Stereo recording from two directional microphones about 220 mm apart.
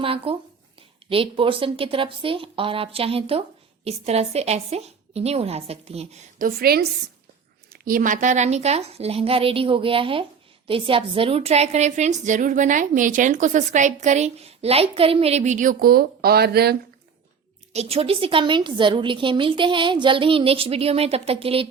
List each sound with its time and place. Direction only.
0.0 s a woman's voice: 25° right (ahead or behind)
6.6 s a woman's voice: 45° right (ahead or behind)
17.7 s a woman's voice: 30° right (ahead or behind)